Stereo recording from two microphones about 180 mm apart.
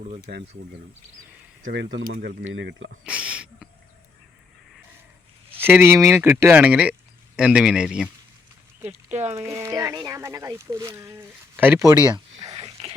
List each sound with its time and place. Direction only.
1.7 s speech: 85° right
3.0 s a sound: 5° right (ahead or behind)
5.5 s a man's voice: 10° right (ahead or behind)
9.3 s speech: 15° right (ahead or behind)
12.4 s whispering: 30° right (ahead or behind)